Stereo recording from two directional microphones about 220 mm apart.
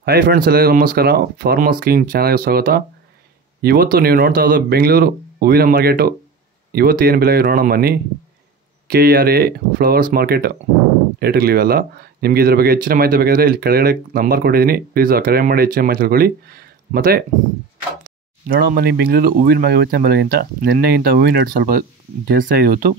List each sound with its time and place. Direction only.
0.0 s speech: 45° right (ahead or behind)
18.5 s speech: 45° right (ahead or behind)